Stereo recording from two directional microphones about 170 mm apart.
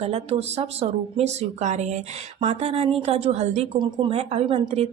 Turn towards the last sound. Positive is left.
turn(degrees=-35)  # may be behind; listen again after turning